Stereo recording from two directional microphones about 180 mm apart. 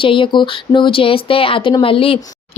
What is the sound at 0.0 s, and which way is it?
Speech, 30° left (ahead or behind).